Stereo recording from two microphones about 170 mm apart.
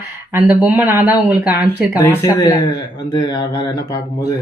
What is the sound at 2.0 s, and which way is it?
Speech, 20° left (ahead or behind).